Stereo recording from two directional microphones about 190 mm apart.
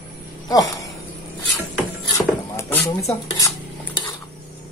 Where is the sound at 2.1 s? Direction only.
15° left (ahead or behind).